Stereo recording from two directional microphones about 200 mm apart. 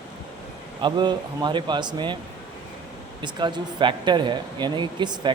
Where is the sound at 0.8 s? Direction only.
20° right (ahead or behind).